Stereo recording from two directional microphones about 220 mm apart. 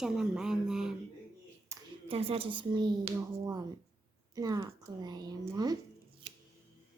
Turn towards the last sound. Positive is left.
turn(degrees=-15)  # may be behind; listen again after turning